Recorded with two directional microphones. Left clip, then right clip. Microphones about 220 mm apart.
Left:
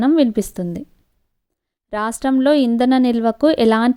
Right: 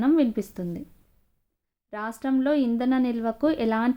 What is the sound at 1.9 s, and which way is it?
A woman's voice, 40° left (ahead or behind).